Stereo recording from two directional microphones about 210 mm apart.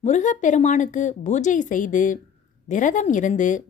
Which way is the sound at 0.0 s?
35° left (ahead or behind).